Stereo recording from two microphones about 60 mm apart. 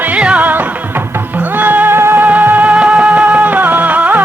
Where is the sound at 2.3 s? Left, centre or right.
Right.